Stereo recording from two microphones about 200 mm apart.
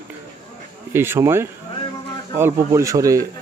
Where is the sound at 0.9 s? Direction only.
10° right (ahead or behind).